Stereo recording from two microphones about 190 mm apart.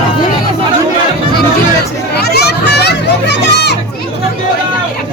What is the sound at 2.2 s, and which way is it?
Children playing, 60° left (ahead or behind).